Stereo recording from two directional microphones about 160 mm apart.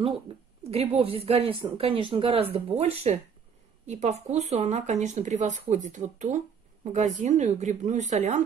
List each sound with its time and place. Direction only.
0.7 s a woman's voice: 40° right (ahead or behind)